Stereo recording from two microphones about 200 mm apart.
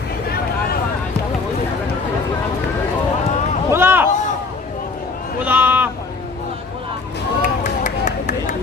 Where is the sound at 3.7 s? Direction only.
10° right (ahead or behind).